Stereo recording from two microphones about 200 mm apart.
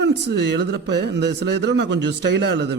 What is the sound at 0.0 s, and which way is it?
Speech, 55° right (ahead or behind).